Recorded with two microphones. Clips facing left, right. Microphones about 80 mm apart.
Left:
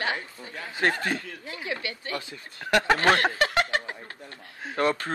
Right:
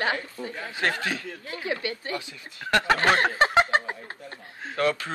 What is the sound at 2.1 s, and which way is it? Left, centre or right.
Speech, left.